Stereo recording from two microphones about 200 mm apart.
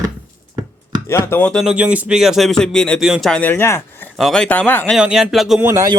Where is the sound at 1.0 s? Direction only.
15° left (ahead or behind).